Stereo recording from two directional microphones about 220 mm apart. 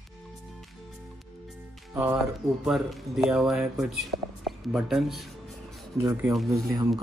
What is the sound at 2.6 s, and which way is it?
Speech, centre (ahead or behind).